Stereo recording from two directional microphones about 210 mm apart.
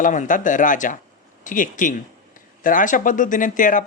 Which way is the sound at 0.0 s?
35° left (ahead or behind).